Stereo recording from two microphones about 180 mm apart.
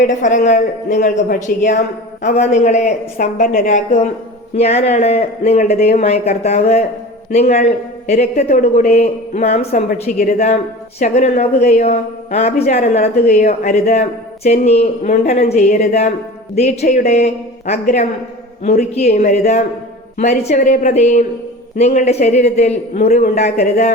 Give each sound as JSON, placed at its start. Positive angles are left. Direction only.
{"t": 0.0, "sound": "speech", "side_deg": 45}